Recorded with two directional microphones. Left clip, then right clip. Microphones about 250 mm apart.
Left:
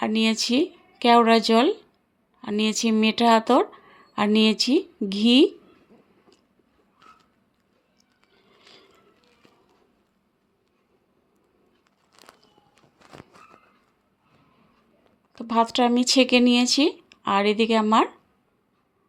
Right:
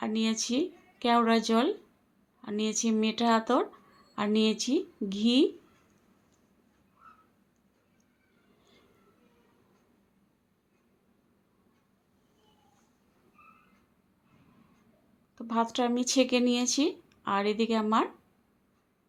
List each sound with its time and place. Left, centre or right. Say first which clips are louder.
0.0 s speech: left 8 dB; left
15.4 s speech: left 8 dB; left